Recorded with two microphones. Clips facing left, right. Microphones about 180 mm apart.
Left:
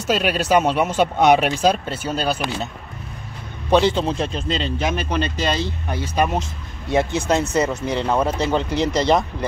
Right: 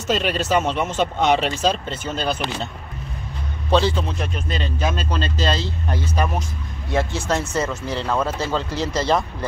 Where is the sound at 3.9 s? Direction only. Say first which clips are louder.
Left 4 dB; 30° left (ahead or behind).